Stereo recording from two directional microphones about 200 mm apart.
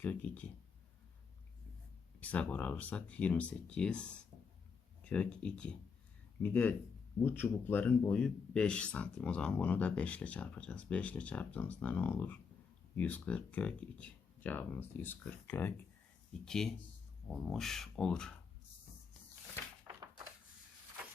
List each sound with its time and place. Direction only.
0.0 s speech: 10° left (ahead or behind)
2.2 s speech: 5° left (ahead or behind)
19.9 s a sound: 20° right (ahead or behind)